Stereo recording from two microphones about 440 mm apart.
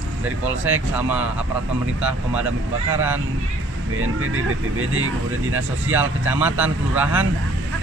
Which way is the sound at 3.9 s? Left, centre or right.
Right.